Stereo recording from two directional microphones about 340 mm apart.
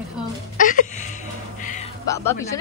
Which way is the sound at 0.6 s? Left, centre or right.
Left.